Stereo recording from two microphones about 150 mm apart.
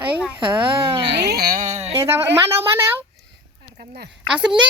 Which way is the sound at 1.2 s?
90° right.